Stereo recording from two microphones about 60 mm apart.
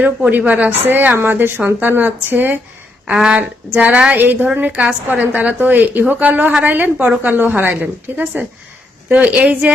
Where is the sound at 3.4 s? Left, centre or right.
Right.